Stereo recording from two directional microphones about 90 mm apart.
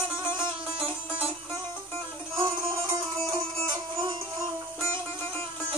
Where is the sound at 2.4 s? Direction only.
60° right (ahead or behind).